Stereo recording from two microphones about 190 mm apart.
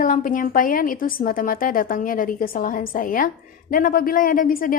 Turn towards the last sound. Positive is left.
turn(degrees=45)  # may be behind; listen again after turning